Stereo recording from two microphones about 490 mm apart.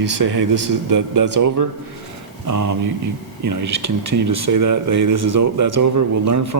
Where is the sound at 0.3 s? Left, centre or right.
Right.